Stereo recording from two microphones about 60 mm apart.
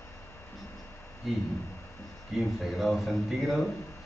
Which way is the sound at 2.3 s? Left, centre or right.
Centre.